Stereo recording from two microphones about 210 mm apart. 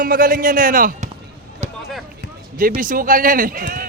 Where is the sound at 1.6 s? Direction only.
35° right (ahead or behind).